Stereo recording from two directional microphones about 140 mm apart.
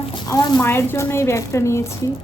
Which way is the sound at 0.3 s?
25° left (ahead or behind).